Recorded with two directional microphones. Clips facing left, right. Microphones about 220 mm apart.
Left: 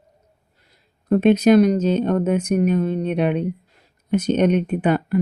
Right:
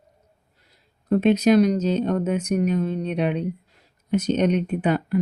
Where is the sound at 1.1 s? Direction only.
55° left (ahead or behind).